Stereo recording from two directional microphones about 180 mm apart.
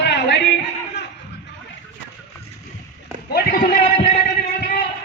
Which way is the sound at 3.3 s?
50° left (ahead or behind).